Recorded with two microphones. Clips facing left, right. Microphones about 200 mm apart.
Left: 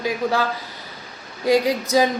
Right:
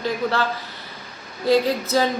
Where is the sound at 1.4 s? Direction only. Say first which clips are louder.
Even; 15° left (ahead or behind).